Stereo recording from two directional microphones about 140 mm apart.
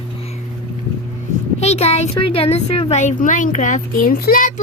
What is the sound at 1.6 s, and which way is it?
Speech, 50° left (ahead or behind).